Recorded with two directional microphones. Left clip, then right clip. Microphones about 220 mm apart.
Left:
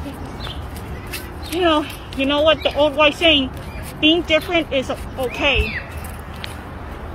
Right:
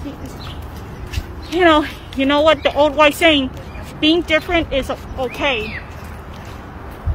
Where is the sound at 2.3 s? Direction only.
25° right (ahead or behind).